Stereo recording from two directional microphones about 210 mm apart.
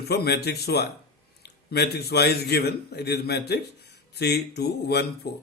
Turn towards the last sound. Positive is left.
turn(degrees=50)  # may be behind; listen again after turning